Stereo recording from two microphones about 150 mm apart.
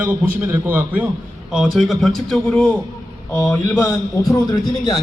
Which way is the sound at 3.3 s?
15° left (ahead or behind).